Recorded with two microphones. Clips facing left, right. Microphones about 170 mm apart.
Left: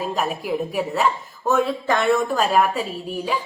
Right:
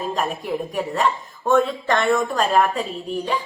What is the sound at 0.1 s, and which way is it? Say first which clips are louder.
A woman's voice: even; 5° left (ahead or behind).